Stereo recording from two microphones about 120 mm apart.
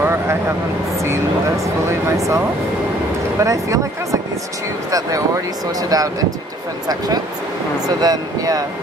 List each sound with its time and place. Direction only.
0.0 s vehicle: 20° right (ahead or behind)
1.9 s speech: 25° right (ahead or behind)
8.0 s speech: 30° right (ahead or behind)